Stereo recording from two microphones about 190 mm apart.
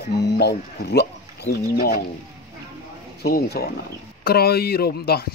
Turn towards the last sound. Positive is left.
turn(degrees=55)  # may be behind; listen again after turning